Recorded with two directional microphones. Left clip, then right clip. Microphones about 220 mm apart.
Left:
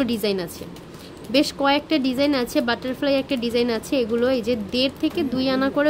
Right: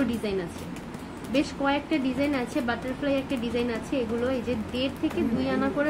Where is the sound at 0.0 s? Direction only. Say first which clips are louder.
Left 5 dB; 50° left (ahead or behind).